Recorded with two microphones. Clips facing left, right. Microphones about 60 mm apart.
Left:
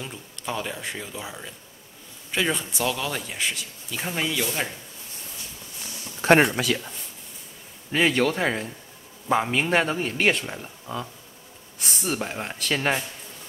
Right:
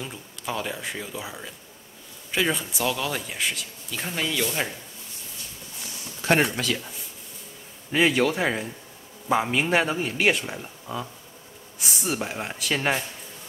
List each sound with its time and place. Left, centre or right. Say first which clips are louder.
0.0 s speech: even; centre
6.2 s speech: left 4 dB; left
6.6 s speech: left 2 dB; centre
7.9 s speech: even; centre